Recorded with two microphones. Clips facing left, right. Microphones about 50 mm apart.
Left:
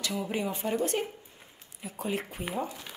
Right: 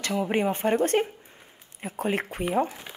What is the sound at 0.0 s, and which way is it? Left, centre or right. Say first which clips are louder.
Speech: right 7 dB; right.